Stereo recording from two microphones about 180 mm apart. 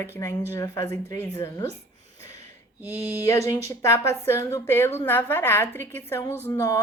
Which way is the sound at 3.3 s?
15° left (ahead or behind).